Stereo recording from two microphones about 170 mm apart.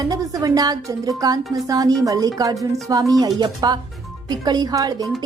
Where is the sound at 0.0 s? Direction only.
20° right (ahead or behind).